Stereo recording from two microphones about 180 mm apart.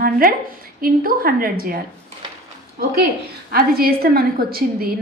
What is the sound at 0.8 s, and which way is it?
Speech, 55° right (ahead or behind).